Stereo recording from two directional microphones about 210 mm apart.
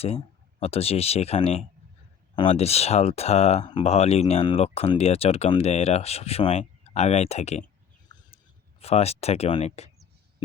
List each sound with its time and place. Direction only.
0.6 s speech: 30° left (ahead or behind)
8.1 s a sound: 20° left (ahead or behind)
8.8 s speech: 30° left (ahead or behind)